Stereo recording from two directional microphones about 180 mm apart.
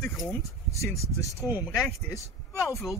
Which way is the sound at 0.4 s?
15° left (ahead or behind).